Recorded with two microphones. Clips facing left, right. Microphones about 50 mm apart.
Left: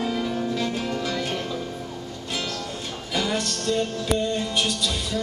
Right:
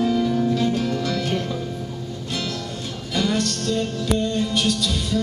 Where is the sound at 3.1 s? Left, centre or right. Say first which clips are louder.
Right 3 dB; centre.